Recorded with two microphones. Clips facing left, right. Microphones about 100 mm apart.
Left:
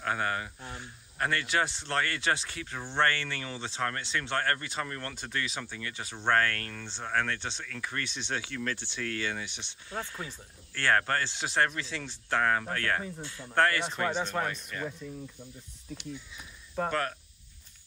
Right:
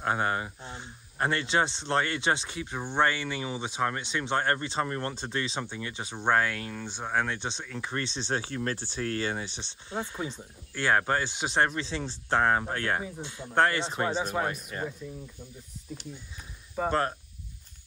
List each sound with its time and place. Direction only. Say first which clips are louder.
0.0 s speech: right 3 dB; 25° right (ahead or behind)
9.9 s speech: right 4 dB; 20° right (ahead or behind)
14.1 s speech: right 2 dB; 10° right (ahead or behind)
14.5 s speech: right 2 dB; 40° right (ahead or behind)
16.8 s speech: right 2 dB; 5° right (ahead or behind)